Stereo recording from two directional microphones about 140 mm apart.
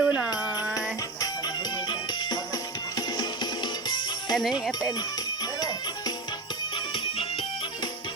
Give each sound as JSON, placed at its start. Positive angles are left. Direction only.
{"t": 0.0, "sound": "music", "side_deg": -5}
{"t": 2.9, "sound": "music", "side_deg": 30}